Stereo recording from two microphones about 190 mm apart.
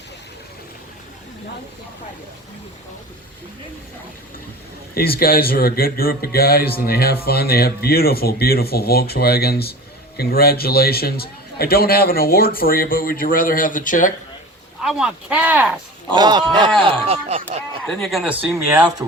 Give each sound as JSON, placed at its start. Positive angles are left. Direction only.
{"t": 4.9, "sound": "a man's voice", "side_deg": 50}
{"t": 14.8, "sound": "speech", "side_deg": -5}
{"t": 16.1, "sound": "speech", "side_deg": -25}
{"t": 17.8, "sound": "speech", "side_deg": 0}